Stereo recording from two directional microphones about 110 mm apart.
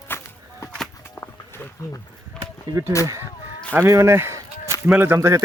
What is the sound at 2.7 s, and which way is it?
Speech, 25° right (ahead or behind).